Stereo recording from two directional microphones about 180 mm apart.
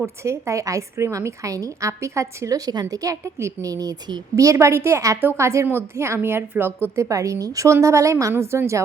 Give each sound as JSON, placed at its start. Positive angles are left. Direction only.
{"t": 0.3, "sound": "a woman's voice", "side_deg": -15}